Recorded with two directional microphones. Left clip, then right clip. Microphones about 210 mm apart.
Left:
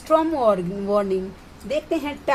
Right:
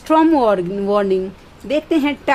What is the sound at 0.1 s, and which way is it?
A woman's voice, 40° right (ahead or behind).